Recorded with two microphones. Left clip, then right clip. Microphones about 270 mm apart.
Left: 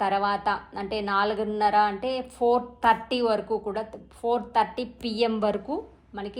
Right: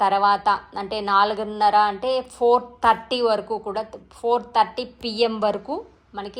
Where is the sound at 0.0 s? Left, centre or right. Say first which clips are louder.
Right 6 dB; centre.